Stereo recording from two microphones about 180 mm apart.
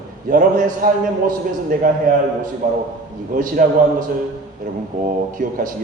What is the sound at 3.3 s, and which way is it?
A man's voice, 50° right (ahead or behind).